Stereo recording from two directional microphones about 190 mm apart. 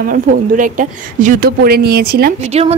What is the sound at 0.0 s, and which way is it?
A woman's voice, 45° right (ahead or behind).